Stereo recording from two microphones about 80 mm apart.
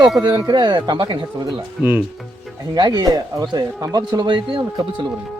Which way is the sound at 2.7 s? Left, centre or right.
Right.